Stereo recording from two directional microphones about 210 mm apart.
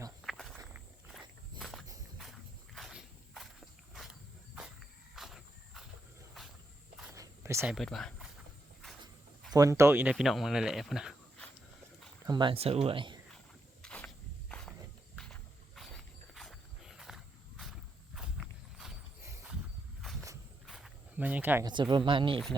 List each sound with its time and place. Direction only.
0.3 s walk: centre (ahead or behind)
5.1 s cricket: centre (ahead or behind)
7.0 s a sound: 10° right (ahead or behind)
7.8 s speech: centre (ahead or behind)
9.5 s speech: 15° right (ahead or behind)
12.2 s speech: 20° right (ahead or behind)
13.8 s snake: 5° left (ahead or behind)
15.1 s wild animals: centre (ahead or behind)
16.3 s walk: centre (ahead or behind)
19.2 s horse: 10° right (ahead or behind)
20.7 s a sound: centre (ahead or behind)
21.7 s speech: 20° right (ahead or behind)